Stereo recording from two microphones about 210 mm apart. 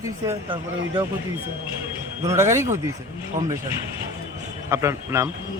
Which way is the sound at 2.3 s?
15° right (ahead or behind).